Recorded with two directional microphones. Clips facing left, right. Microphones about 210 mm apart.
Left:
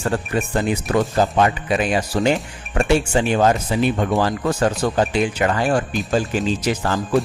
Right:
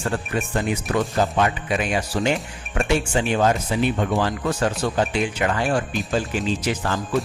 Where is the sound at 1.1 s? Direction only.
35° left (ahead or behind).